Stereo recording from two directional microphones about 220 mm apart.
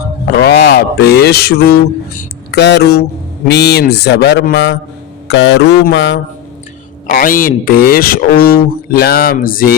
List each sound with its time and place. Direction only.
0.3 s a man's voice: 50° left (ahead or behind)
7.1 s speech: 40° left (ahead or behind)